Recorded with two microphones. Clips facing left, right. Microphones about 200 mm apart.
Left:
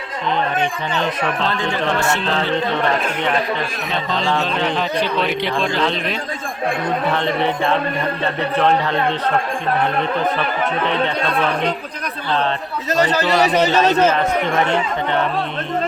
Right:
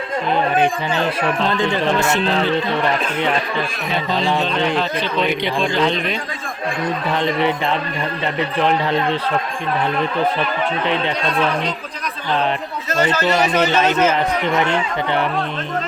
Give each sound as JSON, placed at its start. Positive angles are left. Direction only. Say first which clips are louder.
{"t": 2.0, "sound": "speech", "louder": "right 2 dB", "side_deg": -20}
{"t": 4.1, "sound": "a man's voice", "louder": "right 1 dB", "side_deg": -10}
{"t": 7.2, "sound": "a man's voice", "louder": "even", "side_deg": -15}
{"t": 12.9, "sound": "a man's voice", "louder": "left 1 dB", "side_deg": 35}
{"t": 14.1, "sound": "a man's voice", "louder": "even", "side_deg": -15}